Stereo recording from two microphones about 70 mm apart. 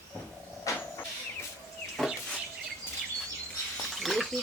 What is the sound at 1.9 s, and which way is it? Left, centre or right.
Chicken, centre.